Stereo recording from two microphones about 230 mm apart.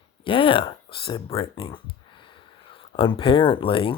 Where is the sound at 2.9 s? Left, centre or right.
Left.